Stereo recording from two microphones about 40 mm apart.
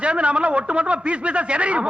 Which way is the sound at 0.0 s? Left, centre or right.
Right.